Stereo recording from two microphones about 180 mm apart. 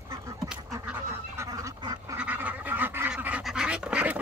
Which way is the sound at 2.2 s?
10° right (ahead or behind).